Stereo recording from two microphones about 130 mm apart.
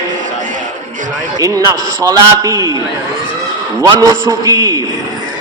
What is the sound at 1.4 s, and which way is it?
A man's voice, 25° right (ahead or behind).